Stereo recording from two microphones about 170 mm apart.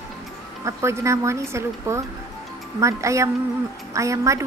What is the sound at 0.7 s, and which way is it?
Speech, 15° right (ahead or behind).